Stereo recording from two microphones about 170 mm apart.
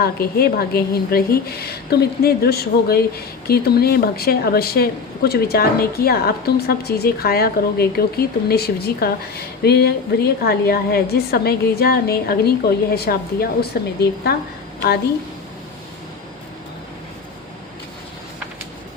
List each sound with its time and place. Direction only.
0.0 s a woman's voice: 65° left (ahead or behind)